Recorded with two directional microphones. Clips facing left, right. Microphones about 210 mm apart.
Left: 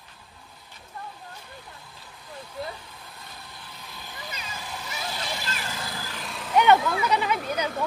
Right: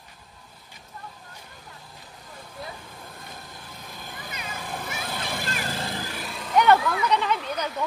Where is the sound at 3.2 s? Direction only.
50° right (ahead or behind).